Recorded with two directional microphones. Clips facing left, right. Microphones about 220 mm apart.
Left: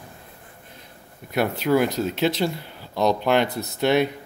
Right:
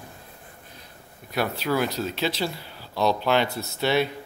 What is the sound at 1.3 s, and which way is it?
Speech, 20° left (ahead or behind).